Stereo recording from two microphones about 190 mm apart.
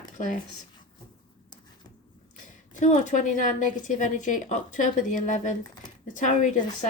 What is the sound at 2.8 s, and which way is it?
A woman's voice, 40° left (ahead or behind).